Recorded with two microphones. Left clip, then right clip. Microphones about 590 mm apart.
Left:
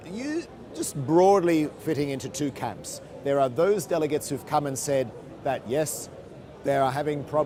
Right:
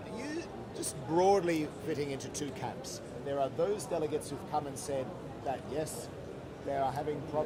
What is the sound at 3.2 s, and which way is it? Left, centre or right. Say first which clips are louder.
Speech: left 10 dB; left.